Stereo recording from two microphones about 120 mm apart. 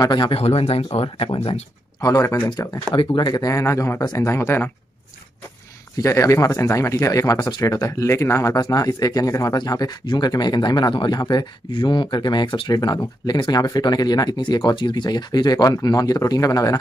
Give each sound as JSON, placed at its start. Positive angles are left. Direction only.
{"t": 0.0, "sound": "speech", "side_deg": 40}
{"t": 2.0, "sound": "speech", "side_deg": 30}
{"t": 2.9, "sound": "speech", "side_deg": 40}
{"t": 5.9, "sound": "speech", "side_deg": 25}